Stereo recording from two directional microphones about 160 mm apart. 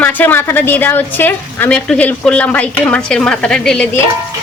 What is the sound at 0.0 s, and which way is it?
A woman's voice, 10° left (ahead or behind).